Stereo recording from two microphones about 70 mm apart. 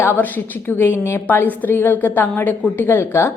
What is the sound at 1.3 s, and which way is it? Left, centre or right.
A woman's voice, left.